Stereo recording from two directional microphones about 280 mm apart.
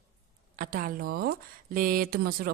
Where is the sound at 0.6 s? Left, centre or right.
Right.